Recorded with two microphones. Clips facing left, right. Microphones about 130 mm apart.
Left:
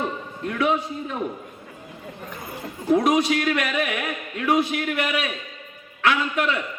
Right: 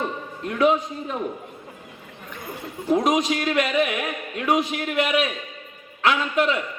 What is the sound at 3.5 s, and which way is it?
A man's voice, 30° right (ahead or behind).